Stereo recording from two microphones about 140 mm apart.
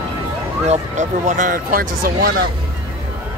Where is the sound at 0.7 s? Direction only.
60° right (ahead or behind); by 2.4 s 90° right.